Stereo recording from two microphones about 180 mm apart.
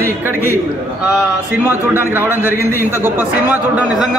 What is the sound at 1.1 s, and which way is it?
A man's voice, 10° right (ahead or behind).